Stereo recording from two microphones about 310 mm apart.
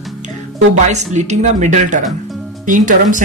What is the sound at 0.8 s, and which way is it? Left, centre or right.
Speech, right.